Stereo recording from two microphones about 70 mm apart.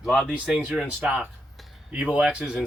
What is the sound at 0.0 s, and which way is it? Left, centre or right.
Speech, centre.